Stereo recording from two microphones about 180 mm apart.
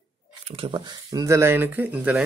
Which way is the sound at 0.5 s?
30° right (ahead or behind).